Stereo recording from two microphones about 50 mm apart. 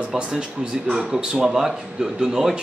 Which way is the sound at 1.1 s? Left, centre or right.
Centre.